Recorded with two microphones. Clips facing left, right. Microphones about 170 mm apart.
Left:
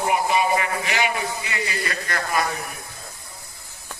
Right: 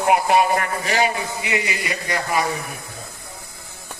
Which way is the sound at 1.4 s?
15° right (ahead or behind).